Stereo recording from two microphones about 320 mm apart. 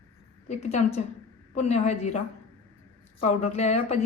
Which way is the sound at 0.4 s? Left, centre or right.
Left.